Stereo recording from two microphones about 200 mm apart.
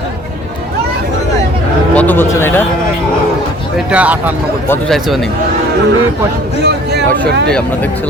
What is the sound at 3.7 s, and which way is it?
Speech, 5° right (ahead or behind).